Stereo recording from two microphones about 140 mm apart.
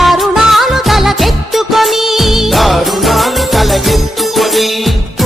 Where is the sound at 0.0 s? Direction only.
Centre (ahead or behind).